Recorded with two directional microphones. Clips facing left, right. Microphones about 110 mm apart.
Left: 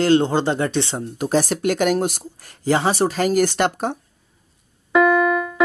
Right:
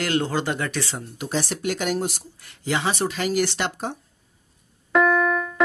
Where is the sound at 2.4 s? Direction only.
40° left (ahead or behind).